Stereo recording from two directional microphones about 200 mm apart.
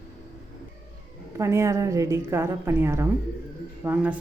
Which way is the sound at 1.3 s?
15° right (ahead or behind).